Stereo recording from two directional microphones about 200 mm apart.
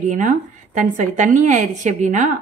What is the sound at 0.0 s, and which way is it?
A woman's voice, 40° right (ahead or behind).